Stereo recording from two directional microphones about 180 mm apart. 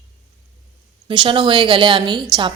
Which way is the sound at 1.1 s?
25° right (ahead or behind).